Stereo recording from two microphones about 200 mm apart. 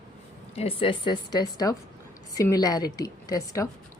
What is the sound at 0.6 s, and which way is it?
A woman's voice, 25° left (ahead or behind).